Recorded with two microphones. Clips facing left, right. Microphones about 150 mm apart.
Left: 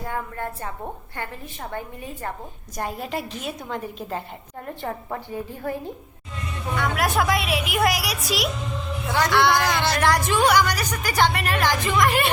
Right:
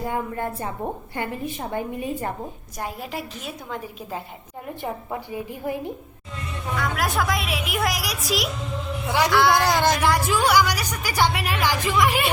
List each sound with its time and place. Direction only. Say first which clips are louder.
0.0 s a woman's voice: right 3 dB; 15° right (ahead or behind)
6.7 s a woman's voice: left 2 dB; centre (ahead or behind)
9.6 s speech: right 3 dB; 40° right (ahead or behind)
10.0 s a woman's voice: left 1 dB; 5° right (ahead or behind)